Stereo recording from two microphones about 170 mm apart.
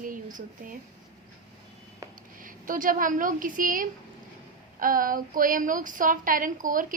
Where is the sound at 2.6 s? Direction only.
55° right (ahead or behind).